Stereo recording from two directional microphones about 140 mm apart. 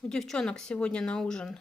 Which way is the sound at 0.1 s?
5° left (ahead or behind).